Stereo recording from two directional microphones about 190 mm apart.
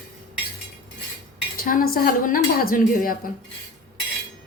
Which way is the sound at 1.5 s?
50° left (ahead or behind).